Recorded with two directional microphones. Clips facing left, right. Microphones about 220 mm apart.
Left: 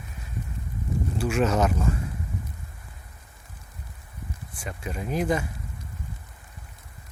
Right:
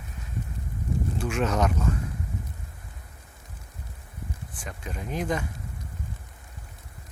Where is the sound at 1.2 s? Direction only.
5° left (ahead or behind).